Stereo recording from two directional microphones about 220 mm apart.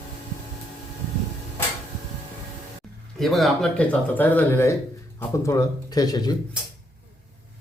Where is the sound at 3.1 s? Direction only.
Centre (ahead or behind); by 6.3 s 20° left (ahead or behind).